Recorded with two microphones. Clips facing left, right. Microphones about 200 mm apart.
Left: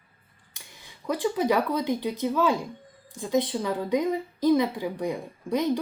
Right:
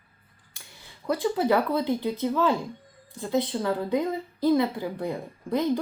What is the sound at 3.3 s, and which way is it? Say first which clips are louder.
A woman's voice: even; 15° left (ahead or behind).